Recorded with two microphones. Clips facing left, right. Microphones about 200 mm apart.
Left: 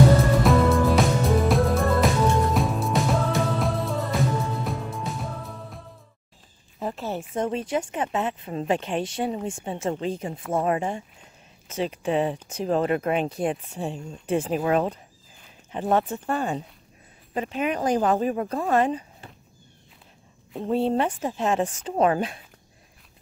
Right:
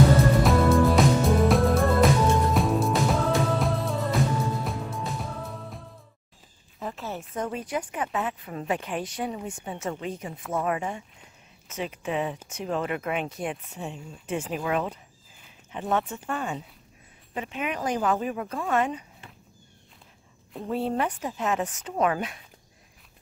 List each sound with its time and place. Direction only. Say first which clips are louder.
0.4 s music: left 1 dB; centre (ahead or behind)
6.8 s speech: left 5 dB; 30° left (ahead or behind)
20.6 s speech: left 4 dB; 25° left (ahead or behind)